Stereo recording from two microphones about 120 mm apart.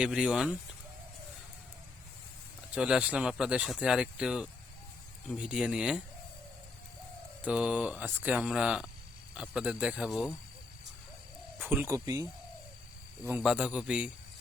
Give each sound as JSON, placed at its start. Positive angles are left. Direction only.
{"t": 0.0, "sound": "speech", "side_deg": -5}
{"t": 2.7, "sound": "speech", "side_deg": -10}
{"t": 7.4, "sound": "speech", "side_deg": -10}
{"t": 11.6, "sound": "speech", "side_deg": -15}
{"t": 13.4, "sound": "speech", "side_deg": -10}